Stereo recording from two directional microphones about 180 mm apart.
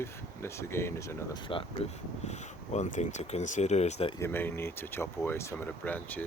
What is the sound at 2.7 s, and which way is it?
Speech, 40° left (ahead or behind).